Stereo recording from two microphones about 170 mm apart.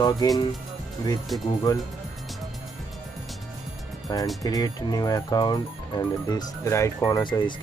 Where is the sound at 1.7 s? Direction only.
20° left (ahead or behind).